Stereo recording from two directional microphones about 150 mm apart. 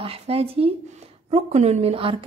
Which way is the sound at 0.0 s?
40° right (ahead or behind).